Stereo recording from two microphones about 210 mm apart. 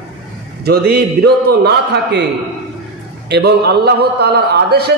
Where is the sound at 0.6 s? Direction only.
50° right (ahead or behind).